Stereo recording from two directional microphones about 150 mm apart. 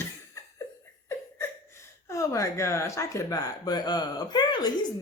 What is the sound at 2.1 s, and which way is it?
Speech, 20° left (ahead or behind).